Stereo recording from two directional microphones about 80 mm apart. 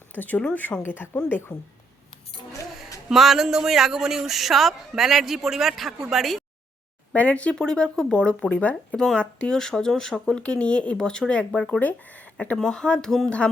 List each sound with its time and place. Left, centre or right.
0.1 s speech: left
3.1 s speech: centre
7.1 s speech: centre
12.5 s speech: centre